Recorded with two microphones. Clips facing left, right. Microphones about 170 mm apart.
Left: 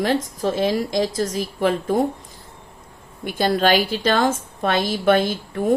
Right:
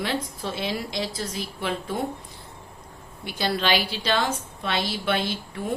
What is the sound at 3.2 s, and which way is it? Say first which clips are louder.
A woman's voice: left 7 dB; 50° left (ahead or behind).